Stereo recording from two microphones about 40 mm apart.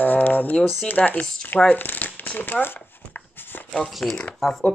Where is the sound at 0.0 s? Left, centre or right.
Left.